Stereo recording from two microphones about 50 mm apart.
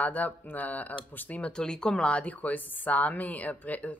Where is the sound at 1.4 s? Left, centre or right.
Centre.